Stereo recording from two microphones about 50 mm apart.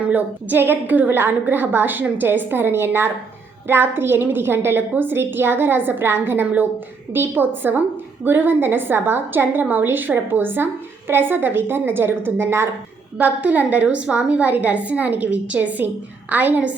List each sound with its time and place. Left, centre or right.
0.1 s a woman's voice: right
13.1 s a woman's voice: right